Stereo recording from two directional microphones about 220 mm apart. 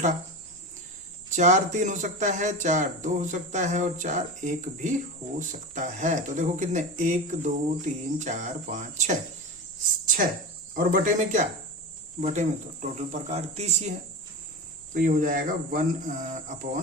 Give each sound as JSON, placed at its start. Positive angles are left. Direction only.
{"t": 1.4, "sound": "speech", "side_deg": -35}
{"t": 10.8, "sound": "speech", "side_deg": -35}
{"t": 14.9, "sound": "speech", "side_deg": -35}